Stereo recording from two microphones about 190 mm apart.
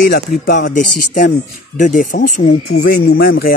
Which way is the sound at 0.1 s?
45° left (ahead or behind).